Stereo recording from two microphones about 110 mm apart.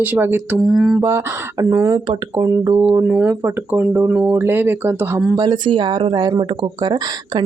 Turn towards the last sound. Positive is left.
turn(degrees=-40)  # may be behind; listen again after turning